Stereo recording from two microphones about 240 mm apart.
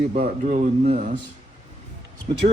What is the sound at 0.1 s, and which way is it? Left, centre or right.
Speech, right.